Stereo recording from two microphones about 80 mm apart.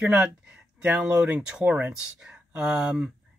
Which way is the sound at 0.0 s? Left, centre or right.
Centre.